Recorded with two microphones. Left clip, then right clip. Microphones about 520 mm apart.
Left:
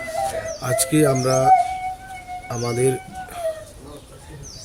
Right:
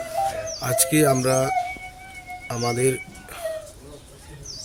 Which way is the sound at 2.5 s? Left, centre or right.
Right.